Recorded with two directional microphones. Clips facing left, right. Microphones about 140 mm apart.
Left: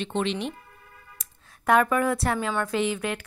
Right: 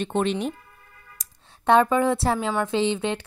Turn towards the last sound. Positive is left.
turn(degrees=-25)  # may be behind; listen again after turning